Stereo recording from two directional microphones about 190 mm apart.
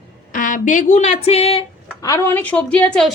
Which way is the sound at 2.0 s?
15° left (ahead or behind).